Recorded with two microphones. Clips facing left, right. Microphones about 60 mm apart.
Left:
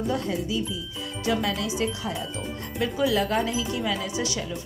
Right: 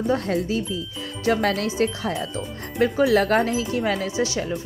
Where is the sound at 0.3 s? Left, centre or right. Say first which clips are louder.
Right 4 dB; right.